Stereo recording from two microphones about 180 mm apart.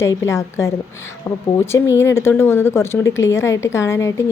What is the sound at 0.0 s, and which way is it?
A woman's voice, 15° left (ahead or behind).